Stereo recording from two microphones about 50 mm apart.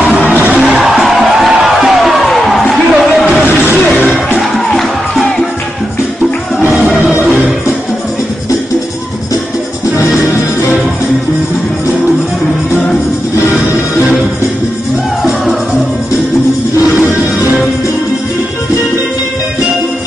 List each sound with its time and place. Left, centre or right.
0.0 s music: right
0.6 s music: centre
7.3 s music: centre